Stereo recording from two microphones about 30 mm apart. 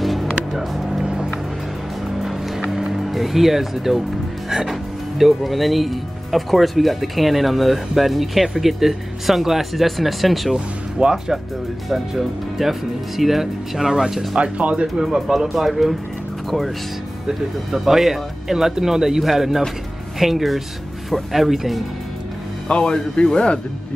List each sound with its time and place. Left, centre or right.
0.0 s music: centre
0.5 s speech: centre
1.0 s music: right
2.0 s music: centre
4.6 s speech: centre
11.0 s speech: right
12.2 s speech: centre
14.3 s speech: right
15.0 s speech: centre
17.6 s speech: centre
22.7 s a man's voice: left